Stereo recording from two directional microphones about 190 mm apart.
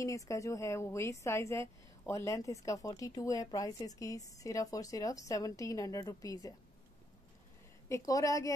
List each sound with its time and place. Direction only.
0.0 s speech: 15° left (ahead or behind)
7.9 s speech: 15° left (ahead or behind)